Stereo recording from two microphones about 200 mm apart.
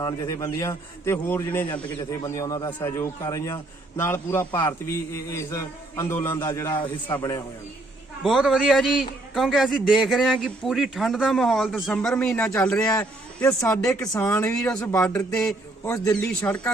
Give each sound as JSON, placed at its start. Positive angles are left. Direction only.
{"t": 0.0, "sound": "a man's voice", "side_deg": 20}
{"t": 8.2, "sound": "a man's voice", "side_deg": 0}
{"t": 15.8, "sound": "a man's voice", "side_deg": 15}